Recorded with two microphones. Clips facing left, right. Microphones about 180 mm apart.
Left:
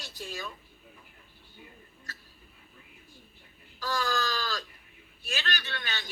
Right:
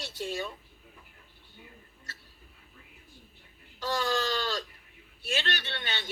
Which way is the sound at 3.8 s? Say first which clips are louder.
Right 2 dB; 30° right (ahead or behind).